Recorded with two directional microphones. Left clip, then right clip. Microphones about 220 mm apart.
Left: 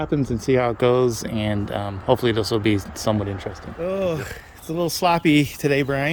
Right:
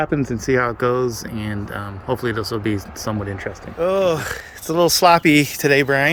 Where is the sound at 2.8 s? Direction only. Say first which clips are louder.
Right 1 dB; 20° left (ahead or behind).